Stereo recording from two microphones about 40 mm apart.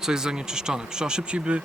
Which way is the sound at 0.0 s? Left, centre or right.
Centre.